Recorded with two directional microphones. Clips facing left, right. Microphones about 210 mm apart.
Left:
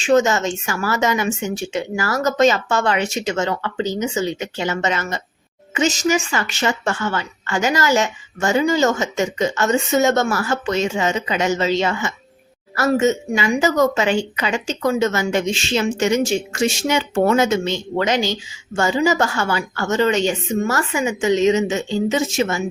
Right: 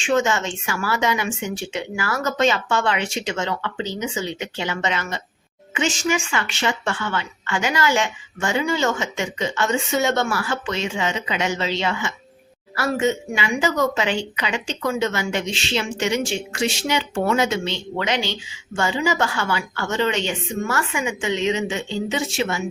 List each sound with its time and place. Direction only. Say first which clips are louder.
0.0 s a woman's voice: left 5 dB; 40° left (ahead or behind)